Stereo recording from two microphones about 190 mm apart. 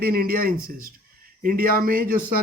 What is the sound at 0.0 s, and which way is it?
Speech, 50° right (ahead or behind).